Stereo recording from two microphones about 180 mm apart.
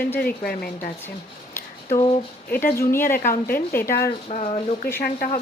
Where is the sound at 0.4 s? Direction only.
55° left (ahead or behind).